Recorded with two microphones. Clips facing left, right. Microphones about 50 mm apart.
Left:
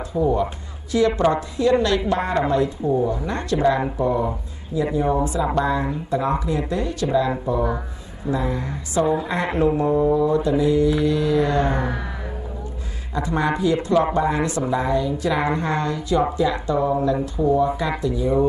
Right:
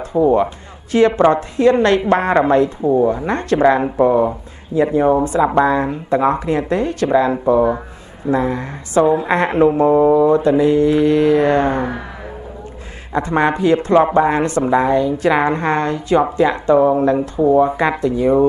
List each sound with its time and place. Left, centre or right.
0.1 s speech: right
0.9 s a woman's voice: right
2.8 s a woman's voice: right
4.8 s a woman's voice: right
10.1 s a woman's voice: right
13.1 s a woman's voice: right